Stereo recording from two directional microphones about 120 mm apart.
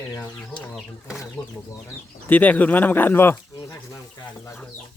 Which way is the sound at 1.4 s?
35° left (ahead or behind).